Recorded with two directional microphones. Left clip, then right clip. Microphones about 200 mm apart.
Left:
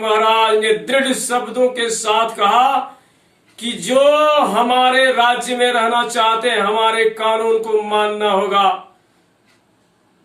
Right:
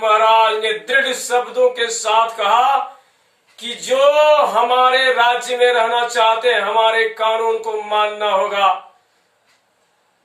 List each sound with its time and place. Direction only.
0.0 s speech: centre (ahead or behind)